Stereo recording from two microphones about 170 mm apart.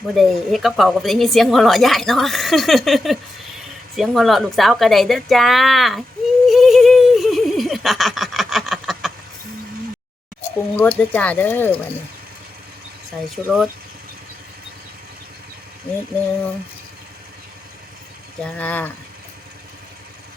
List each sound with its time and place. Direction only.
0.1 s a woman's voice: centre (ahead or behind)
3.9 s a sound: centre (ahead or behind)
10.8 s speech: 10° left (ahead or behind)
13.2 s a woman's voice: centre (ahead or behind)
18.3 s speech: 5° left (ahead or behind)